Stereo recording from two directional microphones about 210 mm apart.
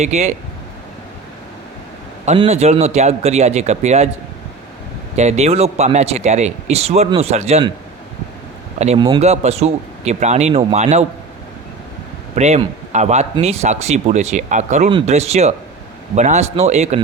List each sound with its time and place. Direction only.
0.0 s speech: 35° right (ahead or behind)
2.2 s speech: 30° right (ahead or behind)
5.1 s speech: 30° right (ahead or behind)
8.8 s speech: 30° right (ahead or behind)
12.4 s speech: 30° right (ahead or behind)